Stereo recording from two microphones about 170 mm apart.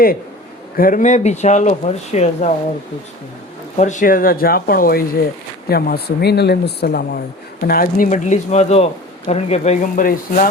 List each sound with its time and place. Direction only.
0.8 s speech: 55° left (ahead or behind)
3.8 s speech: 45° left (ahead or behind); by 7.2 s 70° left (ahead or behind)
7.7 s speech: 55° left (ahead or behind); by 10.0 s 40° left (ahead or behind)
10.0 s speech: 55° left (ahead or behind)